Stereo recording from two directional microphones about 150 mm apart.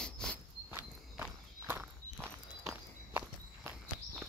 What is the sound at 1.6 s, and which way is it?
Walk, 15° right (ahead or behind).